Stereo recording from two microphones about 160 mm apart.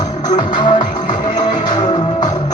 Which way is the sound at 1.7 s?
25° left (ahead or behind).